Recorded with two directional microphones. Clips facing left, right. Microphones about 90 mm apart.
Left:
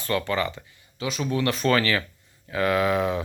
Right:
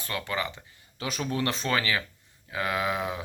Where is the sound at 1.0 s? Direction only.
40° right (ahead or behind).